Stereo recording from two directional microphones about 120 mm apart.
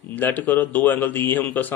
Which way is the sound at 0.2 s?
15° left (ahead or behind).